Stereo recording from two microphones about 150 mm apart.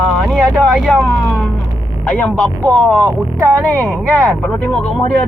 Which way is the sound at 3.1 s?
20° right (ahead or behind).